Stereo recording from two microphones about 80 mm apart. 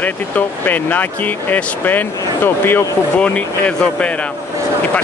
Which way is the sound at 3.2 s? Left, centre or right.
Centre.